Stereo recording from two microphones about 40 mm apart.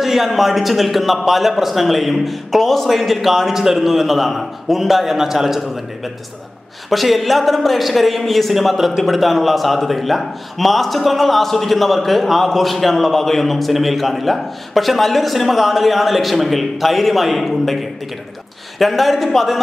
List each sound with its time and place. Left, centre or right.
0.0 s a man's voice: centre
6.9 s a man's voice: centre